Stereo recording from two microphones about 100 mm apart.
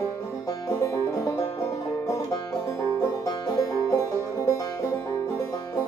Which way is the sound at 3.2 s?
35° left (ahead or behind).